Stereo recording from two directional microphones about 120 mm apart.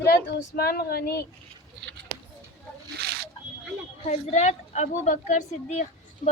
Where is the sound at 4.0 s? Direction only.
65° left (ahead or behind).